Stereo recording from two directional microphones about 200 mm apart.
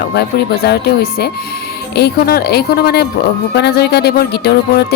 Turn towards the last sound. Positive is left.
turn(degrees=55)  # may be behind; listen again after turning